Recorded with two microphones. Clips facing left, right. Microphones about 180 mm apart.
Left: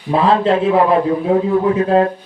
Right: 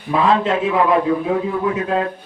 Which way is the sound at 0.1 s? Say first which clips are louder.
Left 3 dB; 35° left (ahead or behind).